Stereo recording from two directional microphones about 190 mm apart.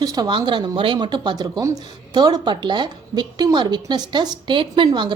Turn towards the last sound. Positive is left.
turn(degrees=-25)  # may be behind; listen again after turning